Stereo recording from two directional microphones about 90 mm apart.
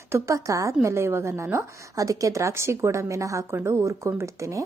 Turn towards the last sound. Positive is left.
turn(degrees=-35)  # may be behind; listen again after turning